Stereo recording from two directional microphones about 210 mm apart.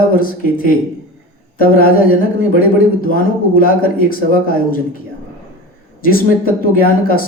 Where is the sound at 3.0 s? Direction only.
45° left (ahead or behind).